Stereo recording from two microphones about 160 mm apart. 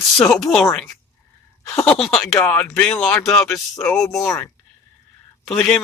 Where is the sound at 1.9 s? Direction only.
Centre (ahead or behind).